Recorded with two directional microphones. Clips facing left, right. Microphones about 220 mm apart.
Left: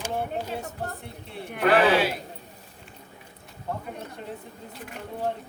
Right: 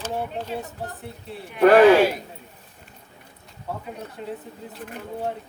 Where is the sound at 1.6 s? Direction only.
45° right (ahead or behind).